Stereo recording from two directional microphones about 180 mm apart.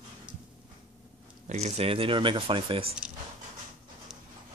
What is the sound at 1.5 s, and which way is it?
Speech, 35° right (ahead or behind).